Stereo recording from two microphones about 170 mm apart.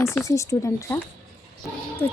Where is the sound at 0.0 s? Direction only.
15° left (ahead or behind).